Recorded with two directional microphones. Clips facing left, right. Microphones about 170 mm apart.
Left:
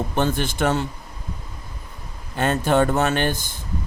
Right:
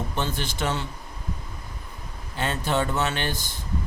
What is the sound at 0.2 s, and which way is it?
Speech, 50° left (ahead or behind).